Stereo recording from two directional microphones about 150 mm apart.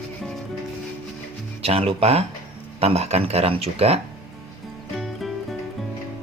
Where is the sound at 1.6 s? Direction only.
40° right (ahead or behind).